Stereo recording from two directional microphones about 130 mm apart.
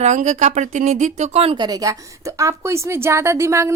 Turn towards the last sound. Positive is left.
turn(degrees=-20)  # may be behind; listen again after turning